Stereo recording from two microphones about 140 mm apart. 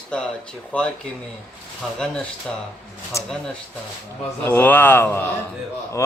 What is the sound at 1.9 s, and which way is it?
Speech, 5° left (ahead or behind).